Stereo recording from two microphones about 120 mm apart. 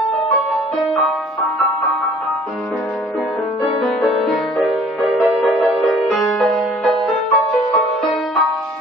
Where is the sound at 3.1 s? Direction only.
Centre (ahead or behind).